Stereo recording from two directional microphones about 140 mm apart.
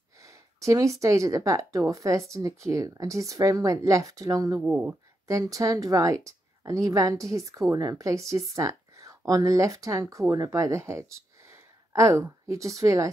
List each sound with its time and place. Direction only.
0.2 s a woman's voice: 20° right (ahead or behind)
11.5 s a sound: 20° right (ahead or behind)
12.8 s a woman's voice: 20° right (ahead or behind)